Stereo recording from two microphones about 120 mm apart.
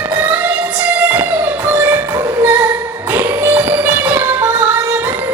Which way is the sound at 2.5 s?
15° right (ahead or behind).